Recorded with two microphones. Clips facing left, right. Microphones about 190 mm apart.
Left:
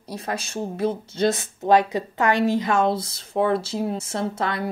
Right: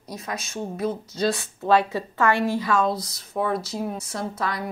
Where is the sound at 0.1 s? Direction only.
30° left (ahead or behind).